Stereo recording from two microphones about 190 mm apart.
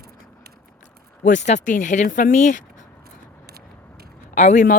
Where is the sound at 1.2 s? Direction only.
40° left (ahead or behind).